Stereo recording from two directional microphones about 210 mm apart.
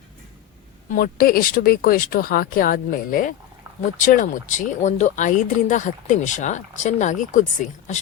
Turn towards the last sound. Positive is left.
turn(degrees=35)  # may be behind; listen again after turning